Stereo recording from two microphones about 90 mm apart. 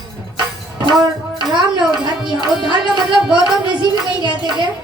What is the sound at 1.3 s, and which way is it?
Music, 60° right (ahead or behind).